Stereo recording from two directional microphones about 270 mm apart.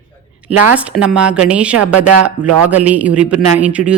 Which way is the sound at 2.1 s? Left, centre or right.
Right.